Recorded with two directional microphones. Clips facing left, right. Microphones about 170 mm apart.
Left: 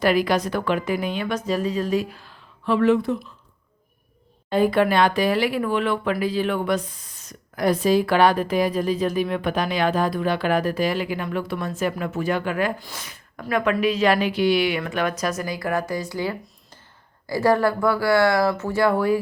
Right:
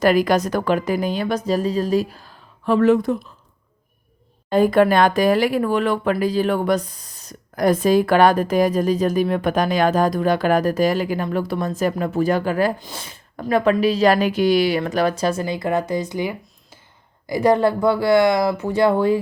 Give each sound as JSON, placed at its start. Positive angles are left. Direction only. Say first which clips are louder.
{"t": 0.0, "sound": "speech", "louder": "right 3 dB", "side_deg": -45}
{"t": 4.4, "sound": "speech", "louder": "right 4 dB", "side_deg": -45}